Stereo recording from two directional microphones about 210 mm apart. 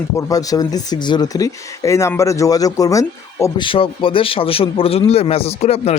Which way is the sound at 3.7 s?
25° left (ahead or behind).